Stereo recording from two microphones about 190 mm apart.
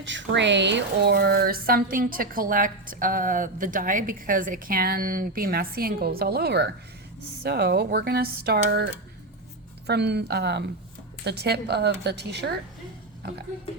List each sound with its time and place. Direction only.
0.0 s speech: 75° right (ahead or behind)